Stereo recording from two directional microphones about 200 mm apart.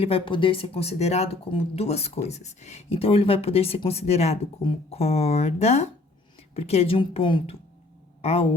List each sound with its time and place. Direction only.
0.0 s speech: 25° left (ahead or behind)